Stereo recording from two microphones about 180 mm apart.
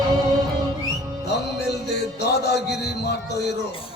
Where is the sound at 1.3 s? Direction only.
65° left (ahead or behind).